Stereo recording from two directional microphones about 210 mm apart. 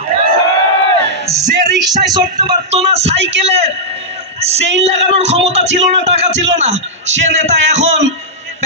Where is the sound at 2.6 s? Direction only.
30° right (ahead or behind).